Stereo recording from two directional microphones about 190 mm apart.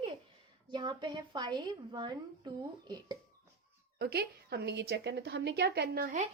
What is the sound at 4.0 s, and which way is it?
A woman's voice, 55° right (ahead or behind).